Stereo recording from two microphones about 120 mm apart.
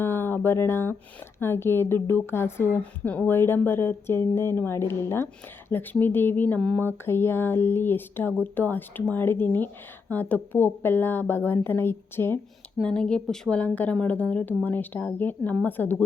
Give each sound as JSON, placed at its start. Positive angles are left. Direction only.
{"t": 0.0, "sound": "a sound", "side_deg": 20}
{"t": 1.4, "sound": "a woman's voice", "side_deg": 20}
{"t": 12.8, "sound": "a woman's voice", "side_deg": 5}